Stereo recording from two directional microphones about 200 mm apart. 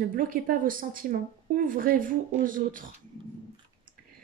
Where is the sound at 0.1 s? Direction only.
45° right (ahead or behind).